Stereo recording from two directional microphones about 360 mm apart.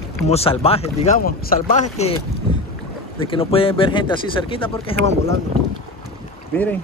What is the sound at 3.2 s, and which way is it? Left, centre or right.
Speech, centre.